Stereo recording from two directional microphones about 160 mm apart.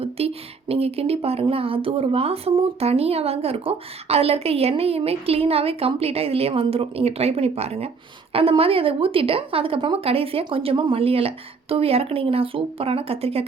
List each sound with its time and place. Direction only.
0.2 s speech: 40° right (ahead or behind)